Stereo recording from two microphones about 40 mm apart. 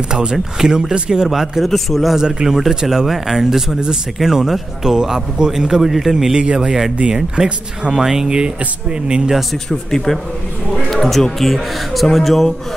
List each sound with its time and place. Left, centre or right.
0.1 s speech: right; by 2.1 s centre
2.1 s speech: centre
5.8 s speech: centre; by 7.5 s right
7.9 s speech: centre
9.0 s speech: right
9.7 s a man's voice: centre